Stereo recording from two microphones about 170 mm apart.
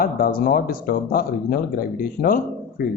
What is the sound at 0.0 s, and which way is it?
Speech, 60° left (ahead or behind).